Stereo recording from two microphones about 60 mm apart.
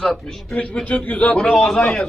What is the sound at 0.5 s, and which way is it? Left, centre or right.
Speech, left.